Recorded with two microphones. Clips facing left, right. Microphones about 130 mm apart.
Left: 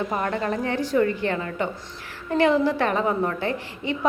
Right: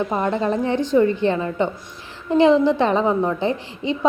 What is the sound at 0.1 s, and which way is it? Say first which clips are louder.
A woman's voice: right 4 dB; 20° right (ahead or behind).